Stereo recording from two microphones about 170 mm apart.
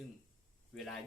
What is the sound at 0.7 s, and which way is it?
Speech, centre (ahead or behind).